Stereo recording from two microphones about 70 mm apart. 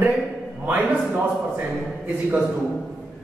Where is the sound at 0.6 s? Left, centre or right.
Right.